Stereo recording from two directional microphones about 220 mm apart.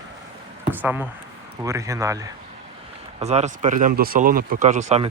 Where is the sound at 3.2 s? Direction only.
30° right (ahead or behind).